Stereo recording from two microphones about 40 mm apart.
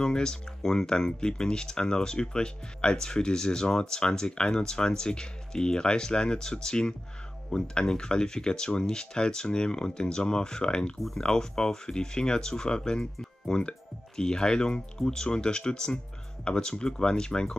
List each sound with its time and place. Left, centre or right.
0.0 s speech: centre